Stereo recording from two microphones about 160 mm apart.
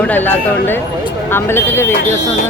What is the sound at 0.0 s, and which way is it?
Speech, 10° left (ahead or behind).